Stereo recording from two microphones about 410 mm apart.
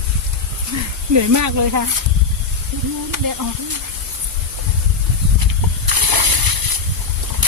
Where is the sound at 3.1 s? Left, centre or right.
Right.